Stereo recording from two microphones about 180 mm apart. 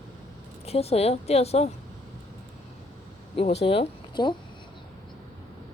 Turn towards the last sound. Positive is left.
turn(degrees=25)  # may be behind; listen again after turning